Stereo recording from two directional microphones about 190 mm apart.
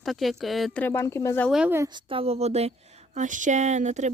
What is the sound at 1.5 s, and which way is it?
A woman's voice, 5° right (ahead or behind).